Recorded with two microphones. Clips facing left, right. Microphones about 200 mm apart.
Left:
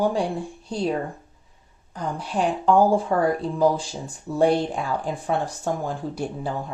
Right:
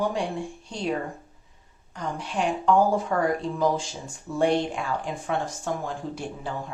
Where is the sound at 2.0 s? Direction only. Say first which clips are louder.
Left 3 dB; 35° left (ahead or behind).